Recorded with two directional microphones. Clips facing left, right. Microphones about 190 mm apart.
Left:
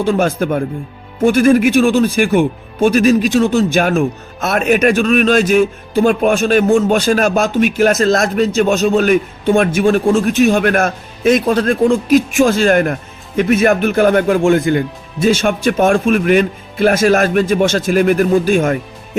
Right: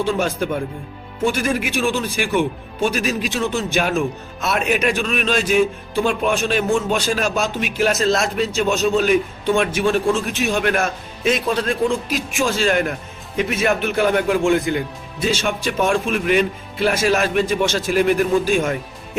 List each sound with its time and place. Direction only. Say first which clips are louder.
0.0 s a man's voice: left 6 dB; 55° left (ahead or behind)